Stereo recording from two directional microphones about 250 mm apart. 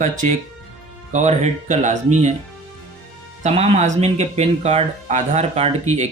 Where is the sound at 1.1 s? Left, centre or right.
Right.